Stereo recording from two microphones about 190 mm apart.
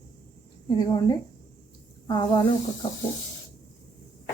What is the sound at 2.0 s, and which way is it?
Speech, 20° left (ahead or behind).